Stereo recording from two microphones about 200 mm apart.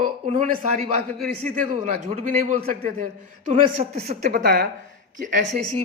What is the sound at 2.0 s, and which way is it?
A man's voice, 35° right (ahead or behind).